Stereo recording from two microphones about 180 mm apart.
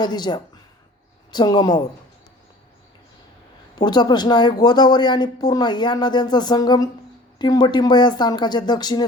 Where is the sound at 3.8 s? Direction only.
25° left (ahead or behind).